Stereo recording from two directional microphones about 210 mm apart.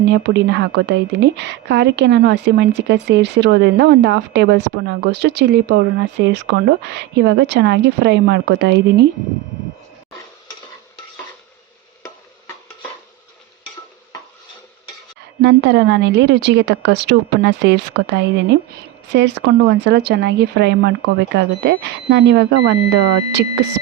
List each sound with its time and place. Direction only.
0.0 s a woman's voice: 55° right (ahead or behind)
15.4 s a woman's voice: 55° right (ahead or behind)